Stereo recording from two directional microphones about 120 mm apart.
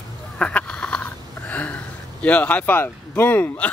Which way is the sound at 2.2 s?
15° left (ahead or behind).